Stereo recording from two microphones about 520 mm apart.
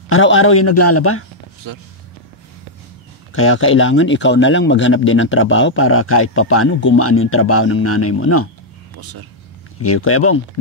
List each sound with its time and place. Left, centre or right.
0.1 s speech: left
1.6 s speech: right
3.3 s speech: left
9.8 s speech: left